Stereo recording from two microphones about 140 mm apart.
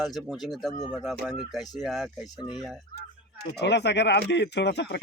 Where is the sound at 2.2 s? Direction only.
30° left (ahead or behind).